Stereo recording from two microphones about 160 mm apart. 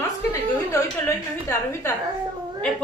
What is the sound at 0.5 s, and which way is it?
A woman's voice, 20° left (ahead or behind).